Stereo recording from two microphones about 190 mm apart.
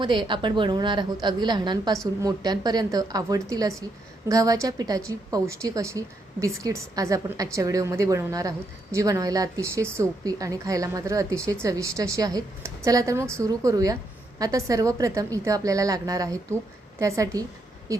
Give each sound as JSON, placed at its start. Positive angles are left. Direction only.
{"t": 0.0, "sound": "a woman's voice", "side_deg": -25}